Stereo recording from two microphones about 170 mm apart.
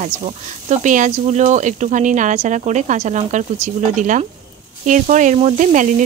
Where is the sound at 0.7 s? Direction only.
45° right (ahead or behind).